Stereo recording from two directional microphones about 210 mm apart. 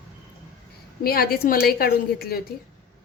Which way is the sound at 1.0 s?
45° left (ahead or behind).